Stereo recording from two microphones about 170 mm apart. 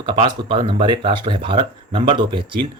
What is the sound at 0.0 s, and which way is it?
Speech, 30° right (ahead or behind).